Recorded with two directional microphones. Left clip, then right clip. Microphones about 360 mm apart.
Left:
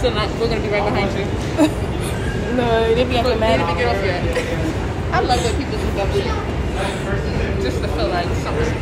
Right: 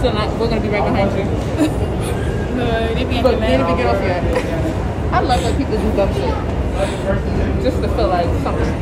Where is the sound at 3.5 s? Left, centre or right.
Centre.